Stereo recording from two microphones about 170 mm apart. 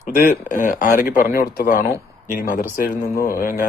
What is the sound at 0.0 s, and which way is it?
Speech, 45° left (ahead or behind).